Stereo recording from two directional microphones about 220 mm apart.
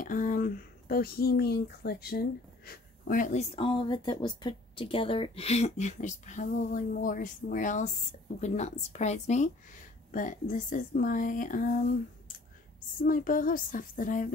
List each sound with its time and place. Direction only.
0.0 s speech: 40° left (ahead or behind)
13.0 s speech: 40° left (ahead or behind)